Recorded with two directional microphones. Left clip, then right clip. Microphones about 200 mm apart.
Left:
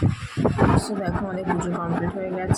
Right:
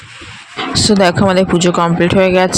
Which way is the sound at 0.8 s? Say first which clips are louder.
Right 17 dB; 45° right (ahead or behind).